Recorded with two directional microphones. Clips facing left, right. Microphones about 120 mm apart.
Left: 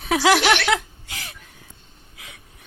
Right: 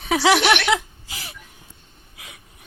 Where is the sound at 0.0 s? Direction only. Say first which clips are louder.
Even; centre (ahead or behind).